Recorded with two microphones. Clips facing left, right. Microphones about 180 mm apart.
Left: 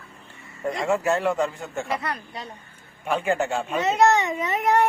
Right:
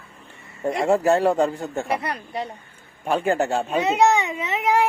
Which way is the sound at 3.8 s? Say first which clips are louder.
Even; 10° right (ahead or behind).